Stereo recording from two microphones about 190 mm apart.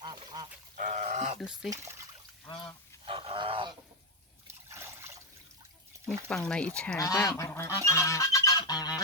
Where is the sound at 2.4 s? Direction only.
25° left (ahead or behind).